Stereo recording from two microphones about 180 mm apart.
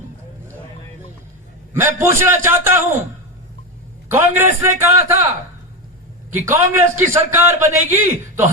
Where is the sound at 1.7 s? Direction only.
15° right (ahead or behind).